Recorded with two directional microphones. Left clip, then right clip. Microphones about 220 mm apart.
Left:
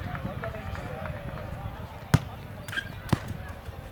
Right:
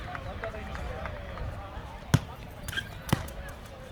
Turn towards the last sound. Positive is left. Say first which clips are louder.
# even
turn(degrees=-30)  # may be behind; listen again after turning